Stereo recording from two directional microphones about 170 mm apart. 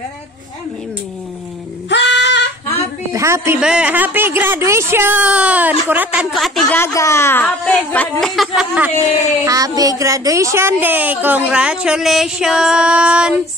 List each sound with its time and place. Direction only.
1.9 s female singing: 90° left
3.1 s speech: 20° right (ahead or behind)
6.3 s a woman's voice: centre (ahead or behind)
6.8 s speech: 15° left (ahead or behind); by 8.9 s 5° right (ahead or behind)
9.0 s speech: 20° right (ahead or behind)